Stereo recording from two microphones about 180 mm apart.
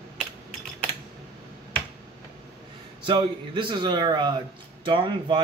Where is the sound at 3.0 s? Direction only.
25° right (ahead or behind).